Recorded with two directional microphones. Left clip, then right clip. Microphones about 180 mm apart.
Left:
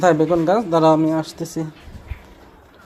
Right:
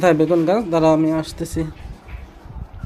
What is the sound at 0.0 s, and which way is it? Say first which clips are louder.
Speech: even; 10° right (ahead or behind).